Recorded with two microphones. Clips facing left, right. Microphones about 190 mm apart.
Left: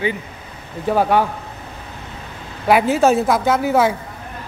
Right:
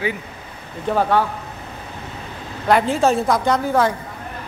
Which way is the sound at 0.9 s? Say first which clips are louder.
Left 2 dB; 10° left (ahead or behind).